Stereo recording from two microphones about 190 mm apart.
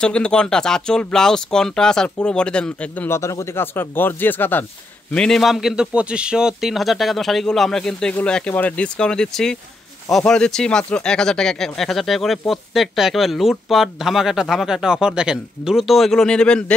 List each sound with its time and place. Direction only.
0.0 s speech: 5° left (ahead or behind)